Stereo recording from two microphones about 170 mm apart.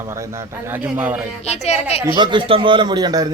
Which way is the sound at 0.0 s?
15° right (ahead or behind).